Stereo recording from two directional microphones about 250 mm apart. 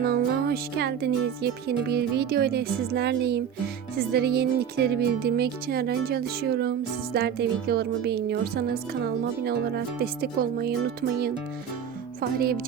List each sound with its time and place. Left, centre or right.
0.0 s speech: right